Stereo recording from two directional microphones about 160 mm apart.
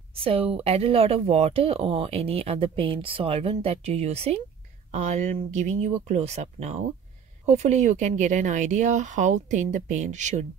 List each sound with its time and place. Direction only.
0.1 s a woman's voice: 35° right (ahead or behind)